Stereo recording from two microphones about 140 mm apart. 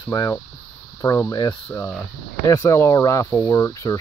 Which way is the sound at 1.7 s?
15° left (ahead or behind).